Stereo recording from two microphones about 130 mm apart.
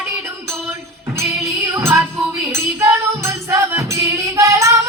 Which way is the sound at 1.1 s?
20° right (ahead or behind).